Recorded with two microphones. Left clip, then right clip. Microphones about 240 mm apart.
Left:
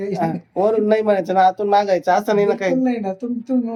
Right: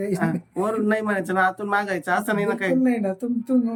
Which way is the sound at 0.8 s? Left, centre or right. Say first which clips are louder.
Left 7 dB; centre.